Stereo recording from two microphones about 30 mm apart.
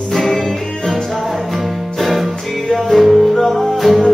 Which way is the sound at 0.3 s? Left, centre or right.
Centre.